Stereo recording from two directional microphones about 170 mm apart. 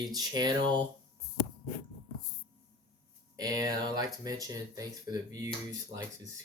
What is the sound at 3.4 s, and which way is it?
Speech, 20° right (ahead or behind).